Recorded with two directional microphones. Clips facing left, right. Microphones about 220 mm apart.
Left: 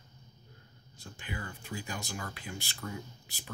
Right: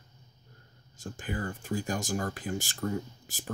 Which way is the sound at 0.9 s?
45° right (ahead or behind).